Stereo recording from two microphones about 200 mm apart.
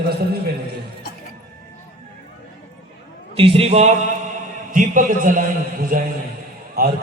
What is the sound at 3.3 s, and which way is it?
A man's voice, 30° right (ahead or behind).